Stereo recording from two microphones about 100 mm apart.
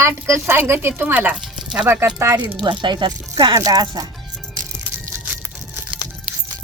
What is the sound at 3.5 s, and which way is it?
Speech, 40° right (ahead or behind).